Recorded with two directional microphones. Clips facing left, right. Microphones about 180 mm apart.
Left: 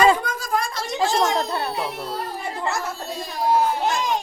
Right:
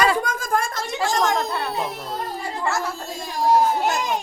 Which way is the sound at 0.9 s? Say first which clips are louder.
Left 1 dB; 20° left (ahead or behind).